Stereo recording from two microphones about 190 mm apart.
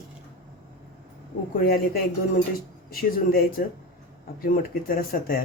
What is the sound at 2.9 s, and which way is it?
Speech, 50° left (ahead or behind).